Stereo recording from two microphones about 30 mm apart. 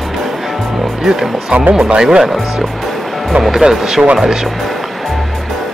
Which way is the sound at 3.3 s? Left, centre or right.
Right.